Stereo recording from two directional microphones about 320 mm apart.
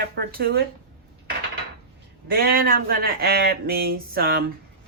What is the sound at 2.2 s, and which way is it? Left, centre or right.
Speech, right.